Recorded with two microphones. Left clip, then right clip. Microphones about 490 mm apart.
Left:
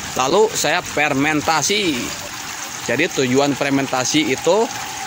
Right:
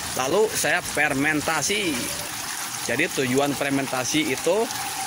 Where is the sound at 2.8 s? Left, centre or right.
Right.